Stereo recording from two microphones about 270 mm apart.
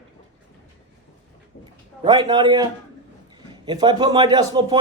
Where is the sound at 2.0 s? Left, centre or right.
Centre.